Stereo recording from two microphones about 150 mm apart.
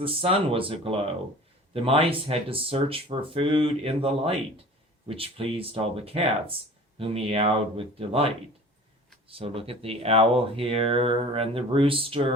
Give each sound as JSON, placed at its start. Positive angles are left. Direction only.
{"t": 0.0, "sound": "speech", "side_deg": -40}
{"t": 9.3, "sound": "speech", "side_deg": -40}